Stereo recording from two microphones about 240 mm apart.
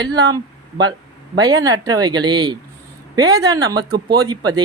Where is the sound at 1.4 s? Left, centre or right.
Centre.